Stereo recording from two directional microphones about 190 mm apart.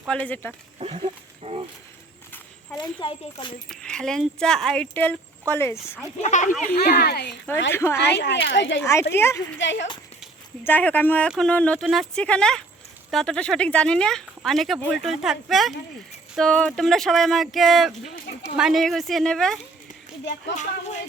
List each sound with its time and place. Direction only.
0.1 s speech: 10° left (ahead or behind)
0.8 s speech: 30° right (ahead or behind)
2.7 s speech: 25° left (ahead or behind)
3.7 s speech: 5° left (ahead or behind)
6.2 s music: 40° left (ahead or behind)
6.8 s speech: 55° left (ahead or behind)
7.7 s speech: 15° left (ahead or behind)
7.9 s speech: 60° left (ahead or behind)
8.8 s speech: 15° left (ahead or behind)
9.6 s speech: 70° left (ahead or behind)
10.6 s speech: 10° left (ahead or behind)
20.6 s music: 35° left (ahead or behind)